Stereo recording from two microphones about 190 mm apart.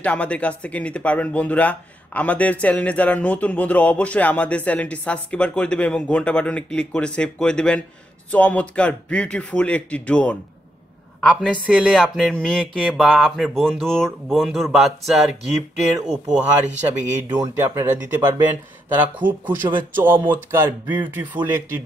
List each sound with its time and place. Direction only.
0.0 s a woman's voice: 5° left (ahead or behind); by 17.9 s 15° right (ahead or behind)
18.9 s speech: 10° right (ahead or behind)